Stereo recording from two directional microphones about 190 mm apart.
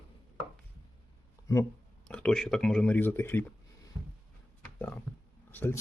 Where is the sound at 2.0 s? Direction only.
5° left (ahead or behind).